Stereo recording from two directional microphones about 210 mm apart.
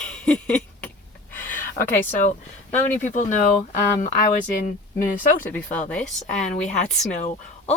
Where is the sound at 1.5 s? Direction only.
40° left (ahead or behind).